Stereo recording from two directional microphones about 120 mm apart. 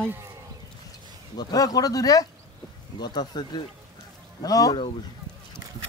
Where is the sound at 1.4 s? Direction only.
35° left (ahead or behind).